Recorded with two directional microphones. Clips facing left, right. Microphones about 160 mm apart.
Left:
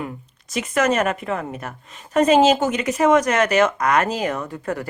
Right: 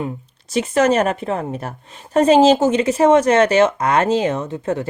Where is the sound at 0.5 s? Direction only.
30° right (ahead or behind).